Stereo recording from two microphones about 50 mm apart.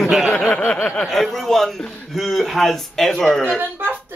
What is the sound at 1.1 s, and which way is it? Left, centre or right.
Speech, centre.